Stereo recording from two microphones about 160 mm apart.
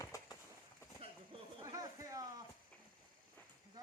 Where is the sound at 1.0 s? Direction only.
35° right (ahead or behind).